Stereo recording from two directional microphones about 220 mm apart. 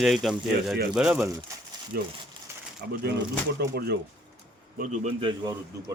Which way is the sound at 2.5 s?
10° right (ahead or behind).